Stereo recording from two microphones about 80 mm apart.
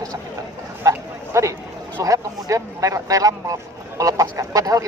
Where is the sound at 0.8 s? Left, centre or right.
Right.